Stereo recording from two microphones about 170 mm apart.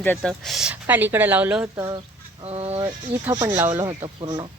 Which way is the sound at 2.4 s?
35° right (ahead or behind).